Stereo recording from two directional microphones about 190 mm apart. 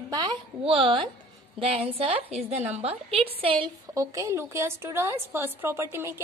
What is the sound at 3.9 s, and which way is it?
A woman's voice, 15° right (ahead or behind).